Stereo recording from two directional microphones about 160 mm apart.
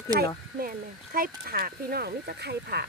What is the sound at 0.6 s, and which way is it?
Speech, 60° right (ahead or behind).